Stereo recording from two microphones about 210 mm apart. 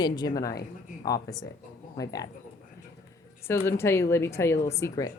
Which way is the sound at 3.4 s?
10° left (ahead or behind).